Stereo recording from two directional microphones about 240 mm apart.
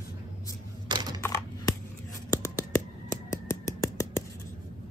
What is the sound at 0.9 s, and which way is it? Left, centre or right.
Typing, centre.